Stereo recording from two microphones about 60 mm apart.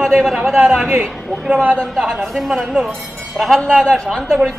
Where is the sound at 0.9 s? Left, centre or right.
Centre.